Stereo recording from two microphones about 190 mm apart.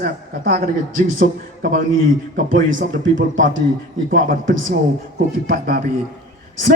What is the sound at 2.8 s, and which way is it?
Speech, 80° right.